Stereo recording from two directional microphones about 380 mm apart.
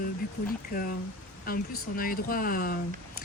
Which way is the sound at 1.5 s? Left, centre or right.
Left.